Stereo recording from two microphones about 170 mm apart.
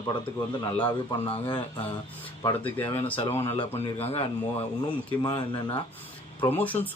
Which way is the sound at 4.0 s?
35° left (ahead or behind).